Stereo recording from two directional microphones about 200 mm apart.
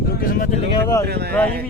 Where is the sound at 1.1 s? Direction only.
55° right (ahead or behind).